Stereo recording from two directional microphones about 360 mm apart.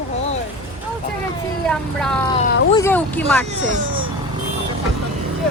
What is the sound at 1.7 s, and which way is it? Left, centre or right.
Speech, centre.